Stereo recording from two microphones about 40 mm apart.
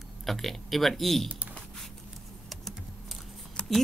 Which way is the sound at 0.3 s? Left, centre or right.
Centre.